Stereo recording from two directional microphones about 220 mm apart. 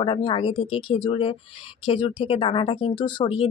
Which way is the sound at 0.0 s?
25° left (ahead or behind).